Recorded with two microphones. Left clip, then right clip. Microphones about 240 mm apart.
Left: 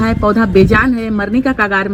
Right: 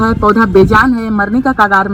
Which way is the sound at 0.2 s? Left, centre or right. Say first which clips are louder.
Right 4 dB; right.